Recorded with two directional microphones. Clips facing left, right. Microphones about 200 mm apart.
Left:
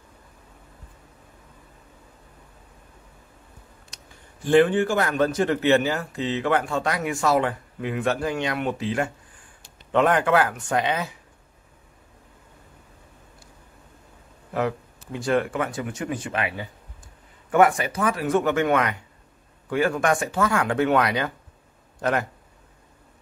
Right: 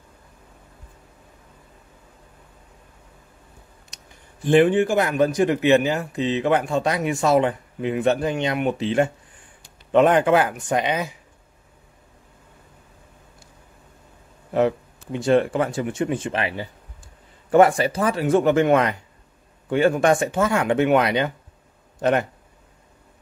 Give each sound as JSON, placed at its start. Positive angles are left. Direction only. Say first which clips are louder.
{"t": 4.5, "sound": "speech", "louder": "right 2 dB", "side_deg": -20}
{"t": 15.1, "sound": "speech", "louder": "right 5 dB", "side_deg": -25}